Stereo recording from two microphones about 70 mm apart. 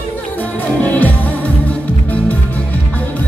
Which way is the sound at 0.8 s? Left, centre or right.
Left.